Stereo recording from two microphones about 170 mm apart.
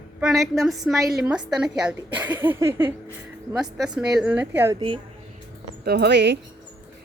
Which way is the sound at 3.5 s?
5° right (ahead or behind).